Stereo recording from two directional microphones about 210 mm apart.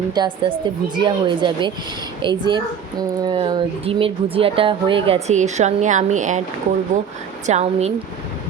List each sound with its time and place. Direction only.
0.1 s speech: 20° right (ahead or behind)
7.4 s a woman's voice: 30° right (ahead or behind)